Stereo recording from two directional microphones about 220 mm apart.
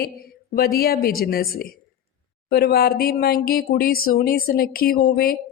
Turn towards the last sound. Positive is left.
turn(degrees=40)  # may be behind; listen again after turning